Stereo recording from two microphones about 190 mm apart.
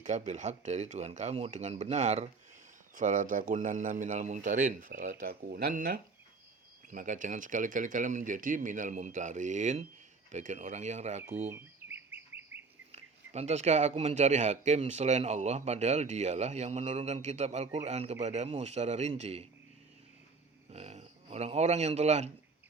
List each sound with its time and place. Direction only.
0.0 s speech: 40° right (ahead or behind)
11.5 s bird: 10° right (ahead or behind)
12.9 s speech: 35° right (ahead or behind)
20.7 s speech: 35° right (ahead or behind)